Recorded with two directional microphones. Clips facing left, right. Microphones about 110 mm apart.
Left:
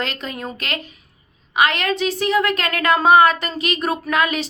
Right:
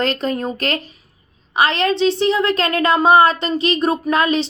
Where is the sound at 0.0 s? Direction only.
40° right (ahead or behind).